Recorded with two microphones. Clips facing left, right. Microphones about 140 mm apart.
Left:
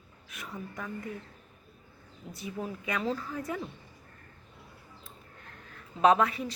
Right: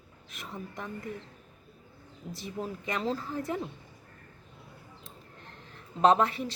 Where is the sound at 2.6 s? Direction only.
35° right (ahead or behind).